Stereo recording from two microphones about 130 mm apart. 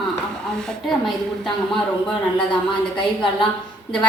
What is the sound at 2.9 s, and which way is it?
Speech, 35° left (ahead or behind).